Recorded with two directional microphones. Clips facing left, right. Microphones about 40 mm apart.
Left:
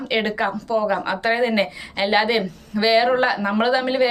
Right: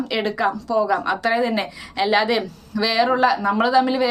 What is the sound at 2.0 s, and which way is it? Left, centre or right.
A woman's voice, left.